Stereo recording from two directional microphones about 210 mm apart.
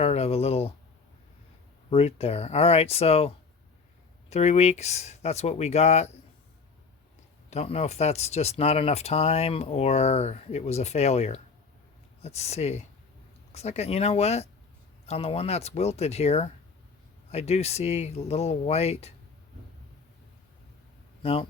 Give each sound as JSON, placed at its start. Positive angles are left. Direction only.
{"t": 0.0, "sound": "a sound", "side_deg": 30}
{"t": 1.9, "sound": "speech", "side_deg": 30}
{"t": 7.5, "sound": "speech", "side_deg": 30}
{"t": 21.2, "sound": "speech", "side_deg": 25}